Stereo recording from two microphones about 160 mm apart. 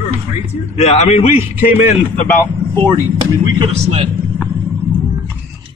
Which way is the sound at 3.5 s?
35° right (ahead or behind).